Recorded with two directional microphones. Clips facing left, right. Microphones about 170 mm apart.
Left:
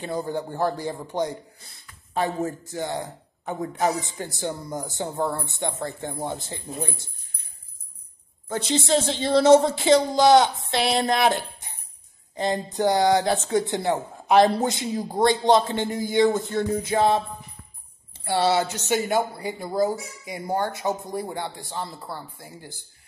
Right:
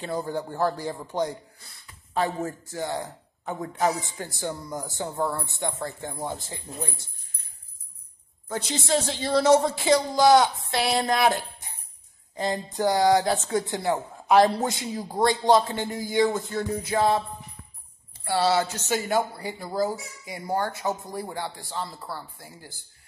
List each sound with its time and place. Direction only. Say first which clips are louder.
0.0 s speech: left 1 dB; 20° left (ahead or behind)
8.5 s speech: left 4 dB; 25° left (ahead or behind)